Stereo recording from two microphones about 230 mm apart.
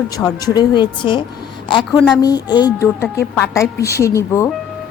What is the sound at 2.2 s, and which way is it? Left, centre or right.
A woman's voice, centre.